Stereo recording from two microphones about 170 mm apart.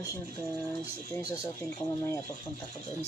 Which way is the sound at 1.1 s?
15° left (ahead or behind).